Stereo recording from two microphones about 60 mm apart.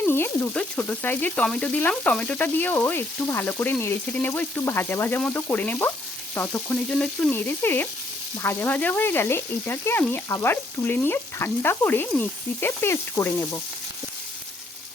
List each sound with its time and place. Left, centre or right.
0.1 s frying: left
0.5 s frying: centre
1.0 s frying: left
1.5 s frying: left
4.6 s frying: left
6.5 s sizzle: centre
7.3 s frying: left
12.5 s sizzle: left